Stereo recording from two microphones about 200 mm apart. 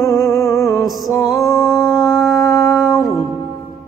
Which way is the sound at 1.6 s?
Centre (ahead or behind).